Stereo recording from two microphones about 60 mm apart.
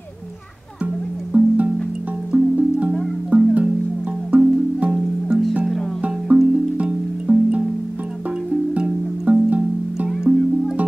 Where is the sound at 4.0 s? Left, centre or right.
Centre.